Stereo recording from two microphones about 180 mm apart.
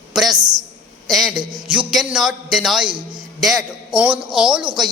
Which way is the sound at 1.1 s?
Centre (ahead or behind).